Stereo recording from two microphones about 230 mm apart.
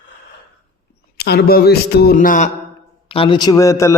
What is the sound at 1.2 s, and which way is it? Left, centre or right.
A man's voice, left.